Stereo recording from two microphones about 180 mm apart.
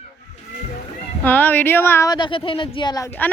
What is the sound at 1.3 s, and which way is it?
A woman's voice, 10° left (ahead or behind).